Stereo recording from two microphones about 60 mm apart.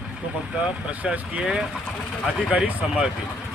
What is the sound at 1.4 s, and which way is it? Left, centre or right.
Speech, centre.